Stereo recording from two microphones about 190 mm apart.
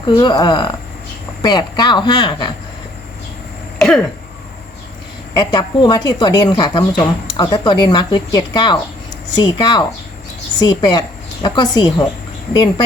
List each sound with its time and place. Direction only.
0.0 s speech: 25° left (ahead or behind)
3.8 s a sound: centre (ahead or behind)
5.3 s speech: 20° left (ahead or behind)